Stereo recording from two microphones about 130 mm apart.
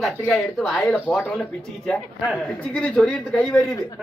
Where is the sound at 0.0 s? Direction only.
Centre (ahead or behind).